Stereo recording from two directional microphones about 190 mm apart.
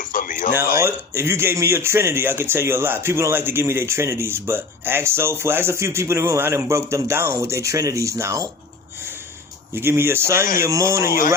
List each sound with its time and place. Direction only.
0.0 s a sound: 45° left (ahead or behind)
0.8 s speech: 15° right (ahead or behind)
9.7 s speech: 15° right (ahead or behind)
11.0 s speech: 50° left (ahead or behind)